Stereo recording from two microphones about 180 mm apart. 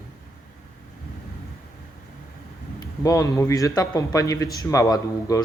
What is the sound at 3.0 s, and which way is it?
A man's voice, 20° left (ahead or behind).